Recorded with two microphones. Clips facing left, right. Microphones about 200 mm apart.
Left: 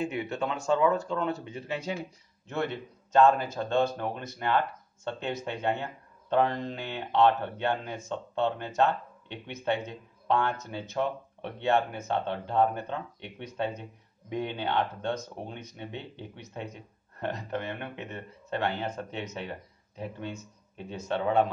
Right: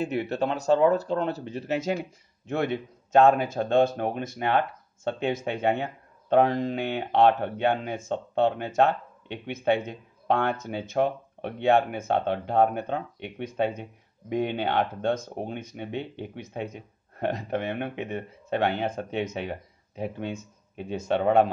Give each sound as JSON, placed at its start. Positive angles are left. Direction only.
{"t": 0.0, "sound": "speech", "side_deg": -35}
{"t": 2.4, "sound": "speech", "side_deg": -55}